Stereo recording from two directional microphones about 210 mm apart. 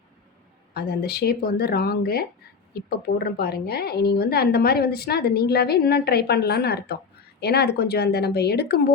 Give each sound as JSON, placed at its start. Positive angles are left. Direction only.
{"t": 0.7, "sound": "a woman's voice", "side_deg": 50}